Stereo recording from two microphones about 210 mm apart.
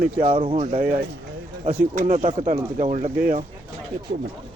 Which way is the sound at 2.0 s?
35° right (ahead or behind).